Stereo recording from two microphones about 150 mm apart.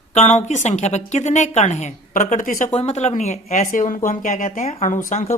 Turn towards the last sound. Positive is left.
turn(degrees=50)  # may be behind; listen again after turning